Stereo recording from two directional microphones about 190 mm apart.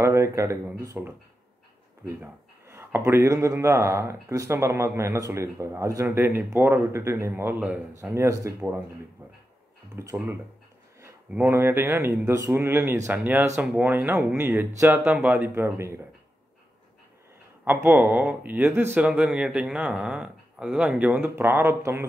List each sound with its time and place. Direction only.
0.0 s speech: 15° right (ahead or behind)
2.0 s speech: 15° right (ahead or behind)
11.3 s speech: 10° right (ahead or behind)
17.8 s speech: 10° right (ahead or behind)